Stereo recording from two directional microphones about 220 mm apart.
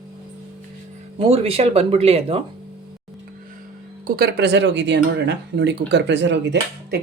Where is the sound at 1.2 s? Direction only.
25° right (ahead or behind).